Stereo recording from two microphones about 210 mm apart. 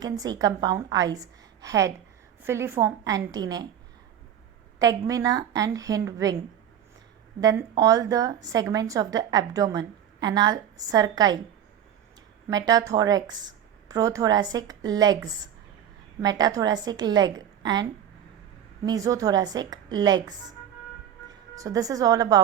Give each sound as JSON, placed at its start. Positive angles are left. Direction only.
{"t": 0.0, "sound": "speech", "side_deg": -15}
{"t": 4.8, "sound": "speech", "side_deg": -15}
{"t": 7.4, "sound": "speech", "side_deg": -15}
{"t": 12.5, "sound": "speech", "side_deg": -15}
{"t": 16.2, "sound": "a woman's voice", "side_deg": -20}
{"t": 18.9, "sound": "a woman's voice", "side_deg": -15}
{"t": 21.5, "sound": "speech", "side_deg": -15}